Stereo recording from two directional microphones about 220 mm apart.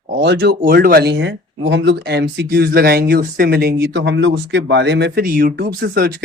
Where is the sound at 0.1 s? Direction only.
50° right (ahead or behind).